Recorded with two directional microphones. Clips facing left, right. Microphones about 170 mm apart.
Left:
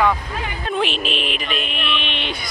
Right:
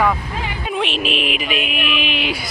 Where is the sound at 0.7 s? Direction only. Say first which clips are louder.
Even; centre (ahead or behind).